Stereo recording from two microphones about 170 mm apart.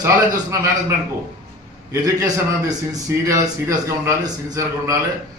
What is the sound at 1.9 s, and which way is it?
A man's voice, 20° right (ahead or behind).